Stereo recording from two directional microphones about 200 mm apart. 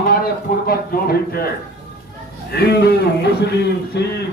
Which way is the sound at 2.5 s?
55° left (ahead or behind).